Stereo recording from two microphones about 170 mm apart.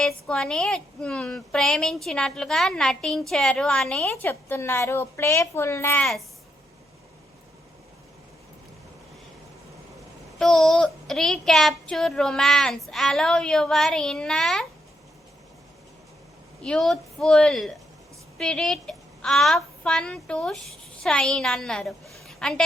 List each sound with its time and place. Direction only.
0.0 s child singing: 5° left (ahead or behind)
4.0 s a woman's voice: 10° left (ahead or behind)
6.0 s child singing: centre (ahead or behind)
10.3 s child singing: centre (ahead or behind)
16.6 s child singing: 5° left (ahead or behind)
18.3 s a woman's voice: 5° left (ahead or behind)